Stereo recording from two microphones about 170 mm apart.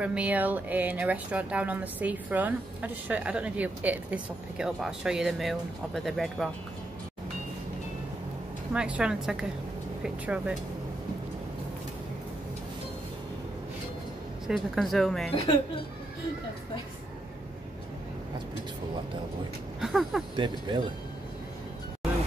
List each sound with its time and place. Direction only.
0.0 s speech: 5° right (ahead or behind)
8.7 s speech: 5° right (ahead or behind)
14.5 s speech: centre (ahead or behind)
19.8 s speech: centre (ahead or behind)
20.3 s speech: 25° right (ahead or behind)